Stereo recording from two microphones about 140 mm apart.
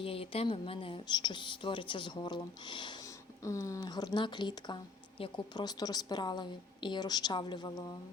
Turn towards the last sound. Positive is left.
turn(degrees=30)  # may be behind; listen again after turning